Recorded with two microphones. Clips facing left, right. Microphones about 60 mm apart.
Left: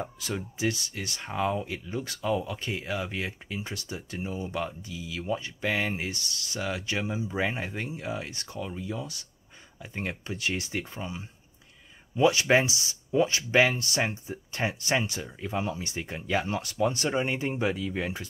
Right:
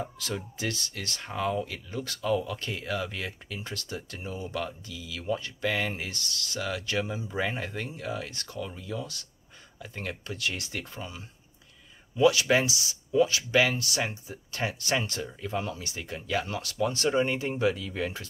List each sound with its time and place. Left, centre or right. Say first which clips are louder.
0.0 s speech: even; centre
15.0 s speech: right 1 dB; centre